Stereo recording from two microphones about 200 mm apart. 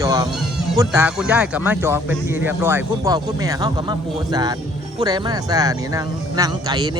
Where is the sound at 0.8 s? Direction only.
10° right (ahead or behind).